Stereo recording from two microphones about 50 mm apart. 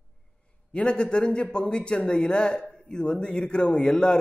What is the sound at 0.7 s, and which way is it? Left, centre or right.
A man's voice, centre.